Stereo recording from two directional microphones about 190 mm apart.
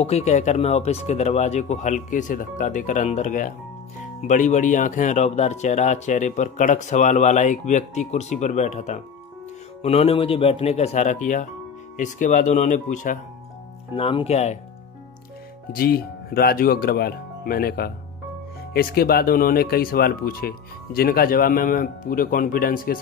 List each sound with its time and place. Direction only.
0.0 s speech: 35° left (ahead or behind)
13.9 s speech: 30° left (ahead or behind)
15.7 s speech: 50° left (ahead or behind)